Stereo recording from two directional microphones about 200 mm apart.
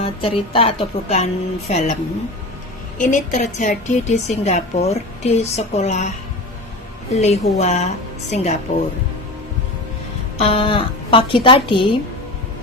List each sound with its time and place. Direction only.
0.0 s a woman's voice: 25° left (ahead or behind)
3.0 s a woman's voice: 40° left (ahead or behind)
7.2 s a woman's voice: 35° left (ahead or behind)
10.3 s a woman's voice: 30° left (ahead or behind)